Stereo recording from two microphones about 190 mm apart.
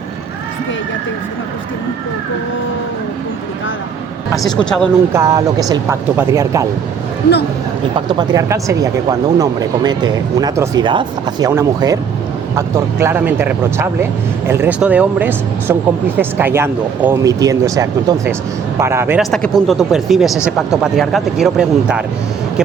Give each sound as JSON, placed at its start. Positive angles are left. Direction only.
{"t": 4.4, "sound": "speech", "side_deg": 5}
{"t": 5.1, "sound": "speech", "side_deg": -15}
{"t": 7.9, "sound": "speech", "side_deg": -20}
{"t": 19.2, "sound": "speech", "side_deg": 0}